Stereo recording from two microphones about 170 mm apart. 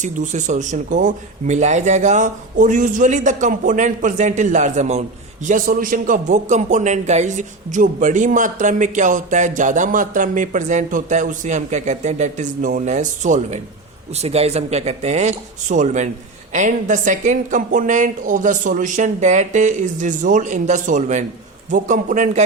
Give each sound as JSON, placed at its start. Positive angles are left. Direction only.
{"t": 0.0, "sound": "a man's voice", "side_deg": -45}
{"t": 5.5, "sound": "a man's voice", "side_deg": -55}